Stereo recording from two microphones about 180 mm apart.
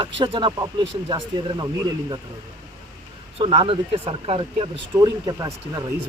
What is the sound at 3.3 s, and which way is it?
Speech, 30° right (ahead or behind).